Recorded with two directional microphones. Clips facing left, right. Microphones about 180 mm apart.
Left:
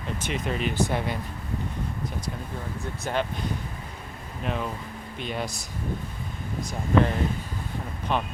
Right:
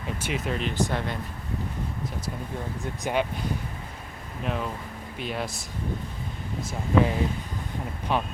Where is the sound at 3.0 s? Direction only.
10° right (ahead or behind).